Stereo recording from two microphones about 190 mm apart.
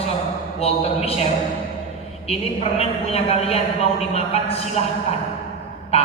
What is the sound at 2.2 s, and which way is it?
A woman's voice, 30° left (ahead or behind).